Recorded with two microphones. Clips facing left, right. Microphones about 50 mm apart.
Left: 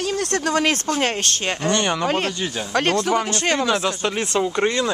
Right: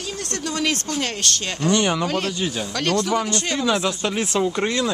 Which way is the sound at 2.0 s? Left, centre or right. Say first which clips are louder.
Left 1 dB; left.